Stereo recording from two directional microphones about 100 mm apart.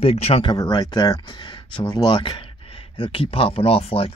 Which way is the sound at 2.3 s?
65° left (ahead or behind).